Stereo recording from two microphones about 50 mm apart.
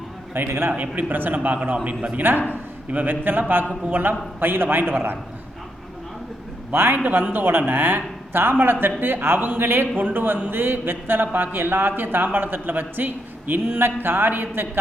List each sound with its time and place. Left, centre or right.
0.3 s a man's voice: right
0.8 s a man's voice: right
6.9 s a man's voice: right
9.9 s a man's voice: right
10.5 s a man's voice: right